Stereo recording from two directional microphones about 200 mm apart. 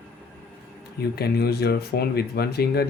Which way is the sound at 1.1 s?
50° left (ahead or behind).